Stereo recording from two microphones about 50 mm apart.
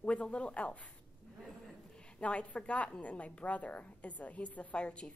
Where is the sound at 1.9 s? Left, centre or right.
Left.